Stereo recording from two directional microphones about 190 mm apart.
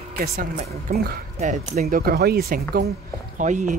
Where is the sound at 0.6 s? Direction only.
35° right (ahead or behind); by 2.6 s 55° right (ahead or behind).